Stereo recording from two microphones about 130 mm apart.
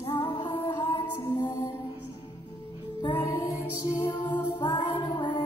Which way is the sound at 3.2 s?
25° left (ahead or behind).